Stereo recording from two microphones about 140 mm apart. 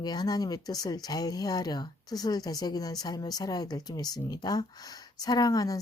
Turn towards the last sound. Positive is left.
turn(degrees=25)  # may be behind; listen again after turning